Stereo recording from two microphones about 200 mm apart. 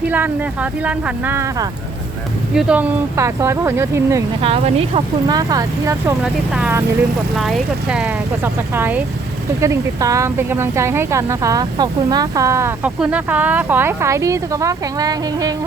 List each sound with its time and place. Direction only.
0.1 s speech: 10° right (ahead or behind)
4.4 s speech: 30° right (ahead or behind)
5.4 s speech: 15° right (ahead or behind)
6.2 s speech: centre (ahead or behind); by 15.5 s 20° right (ahead or behind)